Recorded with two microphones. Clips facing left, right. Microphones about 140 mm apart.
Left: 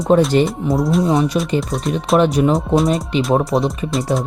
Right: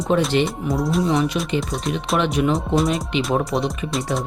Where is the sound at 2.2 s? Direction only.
40° left (ahead or behind).